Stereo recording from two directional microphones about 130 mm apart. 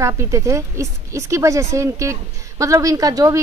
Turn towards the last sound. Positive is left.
turn(degrees=-30)  # may be behind; listen again after turning